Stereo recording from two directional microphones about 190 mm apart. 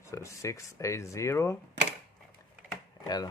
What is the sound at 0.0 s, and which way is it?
Speech, 15° left (ahead or behind).